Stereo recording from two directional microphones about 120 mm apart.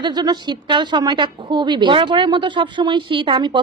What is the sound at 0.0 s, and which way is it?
Speech, 35° right (ahead or behind).